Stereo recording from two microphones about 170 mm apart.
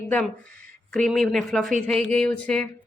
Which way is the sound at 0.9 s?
5° left (ahead or behind).